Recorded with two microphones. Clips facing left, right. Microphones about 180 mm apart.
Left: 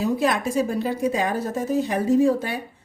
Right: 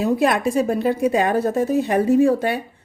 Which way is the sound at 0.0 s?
60° right (ahead or behind).